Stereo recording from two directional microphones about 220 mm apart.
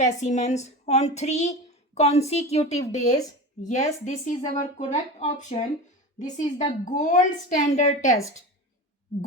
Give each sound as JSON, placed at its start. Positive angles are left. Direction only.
{"t": 0.0, "sound": "a woman's voice", "side_deg": 35}